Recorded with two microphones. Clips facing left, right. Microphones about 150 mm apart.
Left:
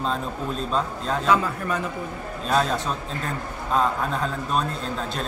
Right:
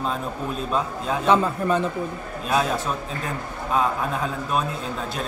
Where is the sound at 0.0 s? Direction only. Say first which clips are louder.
Even; 10° right (ahead or behind).